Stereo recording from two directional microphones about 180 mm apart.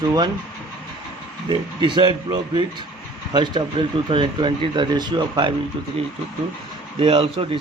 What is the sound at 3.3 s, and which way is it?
Speech, 25° right (ahead or behind).